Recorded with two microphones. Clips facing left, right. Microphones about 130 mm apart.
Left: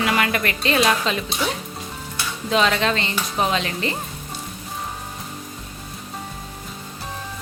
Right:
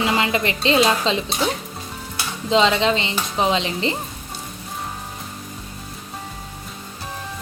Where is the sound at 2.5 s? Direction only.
20° right (ahead or behind).